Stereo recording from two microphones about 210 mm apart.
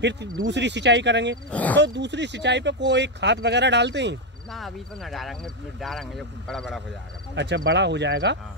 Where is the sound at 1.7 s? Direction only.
55° right (ahead or behind).